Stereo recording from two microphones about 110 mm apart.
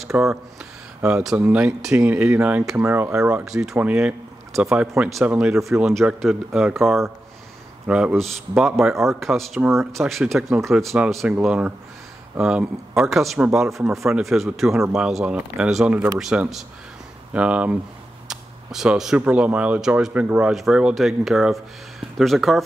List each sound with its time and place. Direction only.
0.0 s a sound: centre (ahead or behind)
1.0 s speech: 10° right (ahead or behind)
3.4 s speech: 5° right (ahead or behind)
11.4 s speech: 10° right (ahead or behind)